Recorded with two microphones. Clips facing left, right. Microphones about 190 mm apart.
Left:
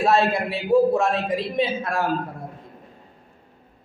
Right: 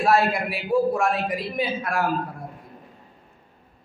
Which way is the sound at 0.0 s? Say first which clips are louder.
Left 1 dB; 25° left (ahead or behind).